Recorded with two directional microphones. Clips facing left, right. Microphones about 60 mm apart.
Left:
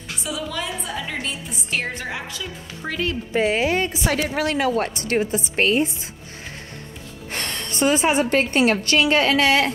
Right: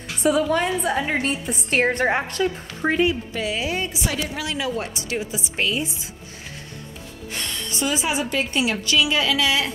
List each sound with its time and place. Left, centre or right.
0.4 s a woman's voice: right
2.0 s a woman's voice: right
2.8 s a woman's voice: right
3.3 s a woman's voice: left
7.3 s a woman's voice: left